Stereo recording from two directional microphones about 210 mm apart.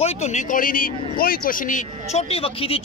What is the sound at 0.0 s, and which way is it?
Speech, 30° left (ahead or behind).